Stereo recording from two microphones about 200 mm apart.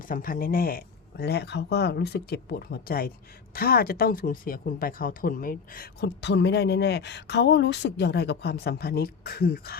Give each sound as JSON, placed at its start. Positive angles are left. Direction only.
{"t": 0.1, "sound": "speech", "side_deg": 45}